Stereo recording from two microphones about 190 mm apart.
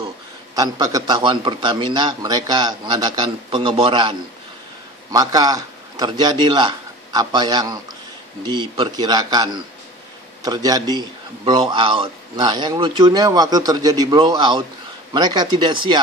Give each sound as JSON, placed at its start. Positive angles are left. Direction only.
{"t": 0.6, "sound": "a man's voice", "side_deg": -20}